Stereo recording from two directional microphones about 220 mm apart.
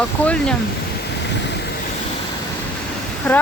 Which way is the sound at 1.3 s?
50° left (ahead or behind).